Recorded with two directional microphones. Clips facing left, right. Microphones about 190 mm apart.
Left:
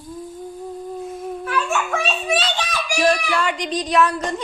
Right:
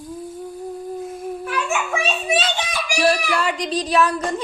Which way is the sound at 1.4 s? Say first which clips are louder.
Left 2 dB; 10° right (ahead or behind).